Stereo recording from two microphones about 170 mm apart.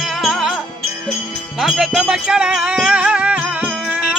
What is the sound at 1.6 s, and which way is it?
Music, centre (ahead or behind).